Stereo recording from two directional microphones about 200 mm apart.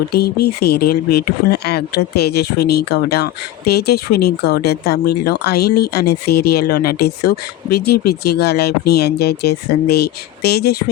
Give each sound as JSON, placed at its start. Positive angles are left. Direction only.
{"t": 0.1, "sound": "speech", "side_deg": 50}